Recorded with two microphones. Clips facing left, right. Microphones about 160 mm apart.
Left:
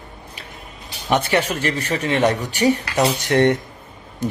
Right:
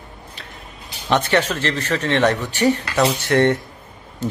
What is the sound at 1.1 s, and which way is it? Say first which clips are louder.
Speech: right 1 dB; 10° left (ahead or behind).